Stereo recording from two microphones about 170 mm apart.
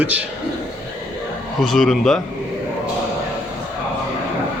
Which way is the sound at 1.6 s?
Centre (ahead or behind).